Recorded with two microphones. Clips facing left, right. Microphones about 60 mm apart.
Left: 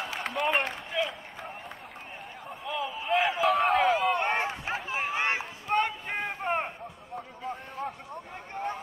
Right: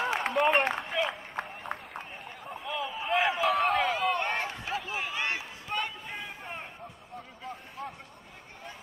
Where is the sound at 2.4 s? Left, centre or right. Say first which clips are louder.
Left 1 dB; centre.